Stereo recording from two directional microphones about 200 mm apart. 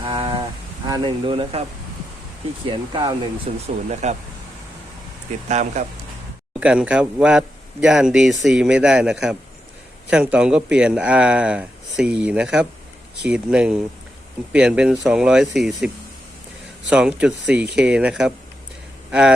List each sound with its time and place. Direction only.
0.0 s a sound: 25° right (ahead or behind)
0.9 s speech: 25° right (ahead or behind)
2.6 s speech: 25° right (ahead or behind)
4.0 s speech: 35° right (ahead or behind)
5.5 s speech: 35° right (ahead or behind)
6.6 s speech: 5° right (ahead or behind)
16.9 s speech: 5° right (ahead or behind)